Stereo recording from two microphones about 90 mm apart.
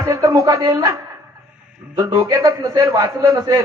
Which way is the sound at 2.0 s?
45° right (ahead or behind).